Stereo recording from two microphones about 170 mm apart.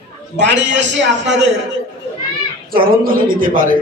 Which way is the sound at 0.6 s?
90° right.